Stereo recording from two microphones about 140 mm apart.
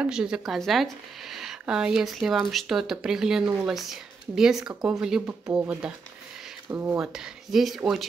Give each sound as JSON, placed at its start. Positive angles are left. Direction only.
{"t": 0.0, "sound": "speech", "side_deg": -5}
{"t": 7.0, "sound": "speech", "side_deg": -5}